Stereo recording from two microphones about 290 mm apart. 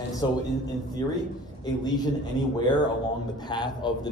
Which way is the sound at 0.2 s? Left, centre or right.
Centre.